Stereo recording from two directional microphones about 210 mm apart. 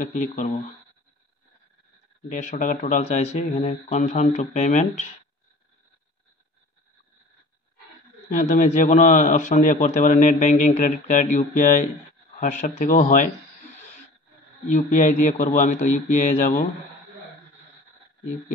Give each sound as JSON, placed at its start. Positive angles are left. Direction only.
{"t": 0.1, "sound": "a man's voice", "side_deg": 35}
{"t": 2.2, "sound": "a man's voice", "side_deg": 40}
{"t": 8.3, "sound": "a man's voice", "side_deg": 35}
{"t": 14.7, "sound": "a man's voice", "side_deg": 35}